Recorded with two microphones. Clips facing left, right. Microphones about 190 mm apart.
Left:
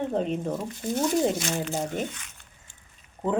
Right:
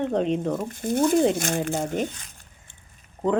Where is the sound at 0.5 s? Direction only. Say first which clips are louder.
Right 4 dB; 50° right (ahead or behind).